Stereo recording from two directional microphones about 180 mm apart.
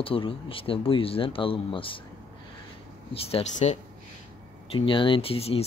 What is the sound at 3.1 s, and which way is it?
Speech, 30° left (ahead or behind).